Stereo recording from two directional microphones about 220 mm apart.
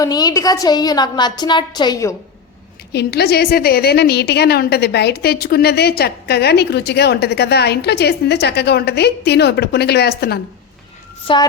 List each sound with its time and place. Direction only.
0.0 s a woman's voice: 15° left (ahead or behind)
2.9 s a woman's voice: 50° left (ahead or behind)
11.3 s a woman's voice: 25° left (ahead or behind)